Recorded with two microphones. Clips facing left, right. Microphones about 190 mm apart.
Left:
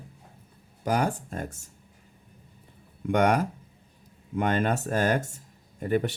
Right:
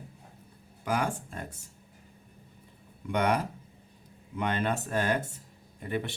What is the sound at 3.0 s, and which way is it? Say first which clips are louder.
Speech: left 5 dB; 50° left (ahead or behind).